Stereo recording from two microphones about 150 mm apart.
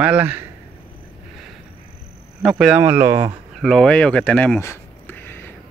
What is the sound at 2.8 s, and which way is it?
Speech, 15° right (ahead or behind).